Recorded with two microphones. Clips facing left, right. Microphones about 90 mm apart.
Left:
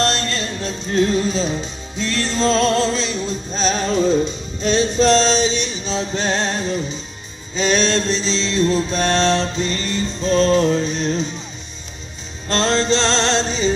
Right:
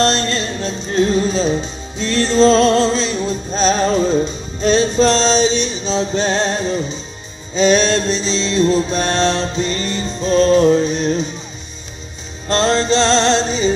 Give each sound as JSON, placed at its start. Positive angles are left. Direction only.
{"t": 0.0, "sound": "music", "side_deg": -25}
{"t": 5.2, "sound": "music", "side_deg": -30}
{"t": 7.5, "sound": "mantra", "side_deg": -15}
{"t": 12.4, "sound": "music", "side_deg": -10}